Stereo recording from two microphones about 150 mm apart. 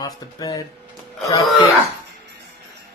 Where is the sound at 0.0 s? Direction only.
25° left (ahead or behind).